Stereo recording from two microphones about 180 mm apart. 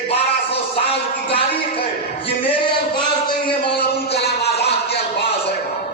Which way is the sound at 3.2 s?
30° left (ahead or behind).